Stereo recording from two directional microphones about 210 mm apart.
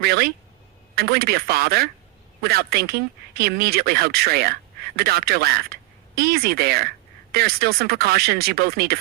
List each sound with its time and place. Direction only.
0.0 s speech: 50° right (ahead or behind)